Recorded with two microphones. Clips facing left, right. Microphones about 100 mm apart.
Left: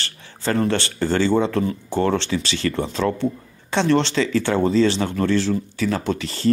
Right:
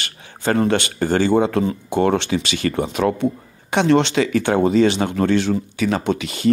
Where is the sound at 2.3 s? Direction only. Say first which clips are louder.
Right 3 dB; 45° right (ahead or behind).